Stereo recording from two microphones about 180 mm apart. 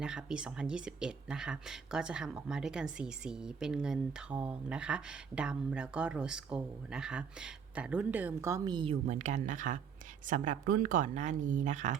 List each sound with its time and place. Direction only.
0.0 s speech: 5° right (ahead or behind); by 9.0 s 25° right (ahead or behind)
9.0 s speech: 40° right (ahead or behind)